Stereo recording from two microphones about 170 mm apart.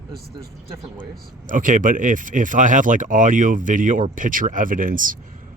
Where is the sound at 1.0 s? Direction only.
50° right (ahead or behind).